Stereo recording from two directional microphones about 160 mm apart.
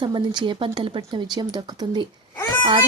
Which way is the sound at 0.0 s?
30° right (ahead or behind).